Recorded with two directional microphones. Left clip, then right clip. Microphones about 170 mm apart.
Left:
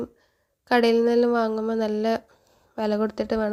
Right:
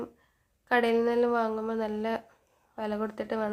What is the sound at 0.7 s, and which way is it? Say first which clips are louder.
A woman's voice: left 6 dB; 40° left (ahead or behind).